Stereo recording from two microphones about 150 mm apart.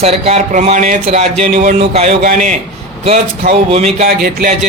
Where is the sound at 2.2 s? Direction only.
60° right (ahead or behind).